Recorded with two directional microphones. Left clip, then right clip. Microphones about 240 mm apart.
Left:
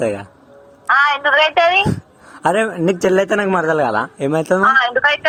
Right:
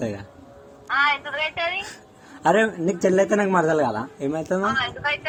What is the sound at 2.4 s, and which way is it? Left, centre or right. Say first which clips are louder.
A man's voice: left 4 dB; left.